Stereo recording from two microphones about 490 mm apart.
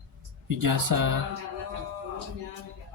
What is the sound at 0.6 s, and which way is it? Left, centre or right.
Music, right.